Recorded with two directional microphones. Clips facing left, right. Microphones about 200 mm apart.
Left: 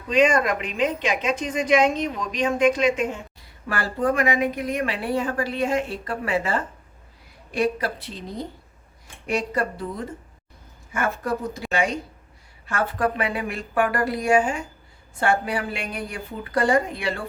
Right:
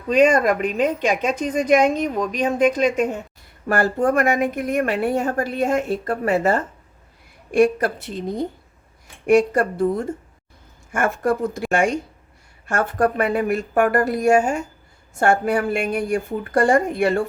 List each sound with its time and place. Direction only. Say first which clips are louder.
0.1 s a woman's voice: right 4 dB; 40° right (ahead or behind)
9.2 s a woman's voice: right 9 dB; 50° right (ahead or behind)